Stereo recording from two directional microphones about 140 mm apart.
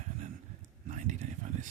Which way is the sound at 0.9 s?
60° right (ahead or behind).